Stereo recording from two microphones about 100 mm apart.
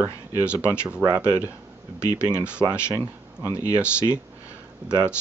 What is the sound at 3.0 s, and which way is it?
Speech, 20° right (ahead or behind).